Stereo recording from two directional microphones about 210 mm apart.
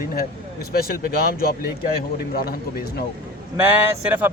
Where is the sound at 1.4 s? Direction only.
45° left (ahead or behind).